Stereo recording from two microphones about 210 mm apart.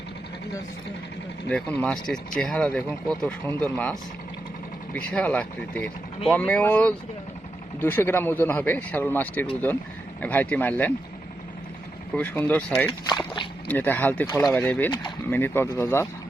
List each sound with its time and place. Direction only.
1.5 s speech: 5° left (ahead or behind)
4.9 s speech: 5° left (ahead or behind)
12.1 s speech: 10° left (ahead or behind)
12.9 s speech: 20° left (ahead or behind)
13.7 s speech: 10° left (ahead or behind)